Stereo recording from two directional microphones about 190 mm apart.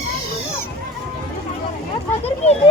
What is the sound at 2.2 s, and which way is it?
Speech, 35° left (ahead or behind).